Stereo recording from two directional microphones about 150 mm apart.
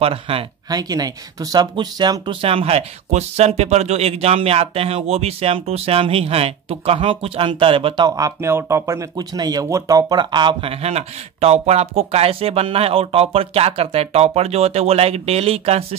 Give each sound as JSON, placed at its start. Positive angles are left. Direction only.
{"t": 0.0, "sound": "speech", "side_deg": -40}
{"t": 0.7, "sound": "speech", "side_deg": -25}
{"t": 10.8, "sound": "speech", "side_deg": -45}